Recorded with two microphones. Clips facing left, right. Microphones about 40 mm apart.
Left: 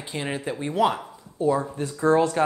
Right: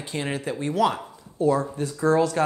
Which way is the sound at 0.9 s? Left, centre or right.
Centre.